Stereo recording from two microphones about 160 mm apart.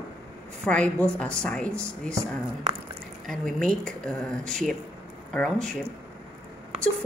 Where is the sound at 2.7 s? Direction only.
45° right (ahead or behind).